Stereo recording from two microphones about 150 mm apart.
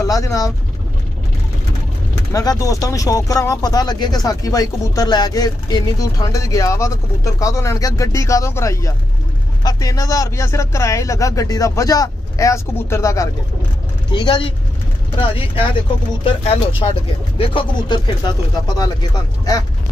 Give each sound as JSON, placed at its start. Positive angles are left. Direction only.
{"t": 0.0, "sound": "speech", "side_deg": 20}
{"t": 2.3, "sound": "speech", "side_deg": 20}
{"t": 14.1, "sound": "speech", "side_deg": 35}